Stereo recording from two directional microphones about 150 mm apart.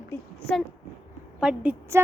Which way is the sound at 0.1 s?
5° left (ahead or behind).